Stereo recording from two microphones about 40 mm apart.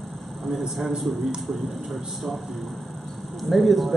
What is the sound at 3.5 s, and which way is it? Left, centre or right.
Speech, centre.